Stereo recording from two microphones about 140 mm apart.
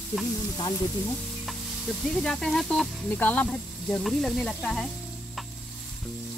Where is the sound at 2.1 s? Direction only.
5° left (ahead or behind).